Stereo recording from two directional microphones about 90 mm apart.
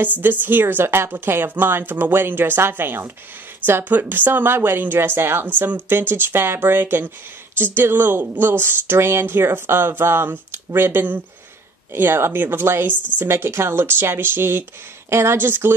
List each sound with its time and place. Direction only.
0.2 s speech: 20° right (ahead or behind)